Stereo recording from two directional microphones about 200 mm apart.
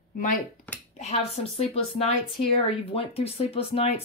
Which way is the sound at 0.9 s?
30° left (ahead or behind).